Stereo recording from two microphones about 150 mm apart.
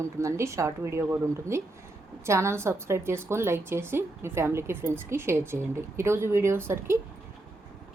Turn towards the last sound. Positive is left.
turn(degrees=-15)  # may be behind; listen again after turning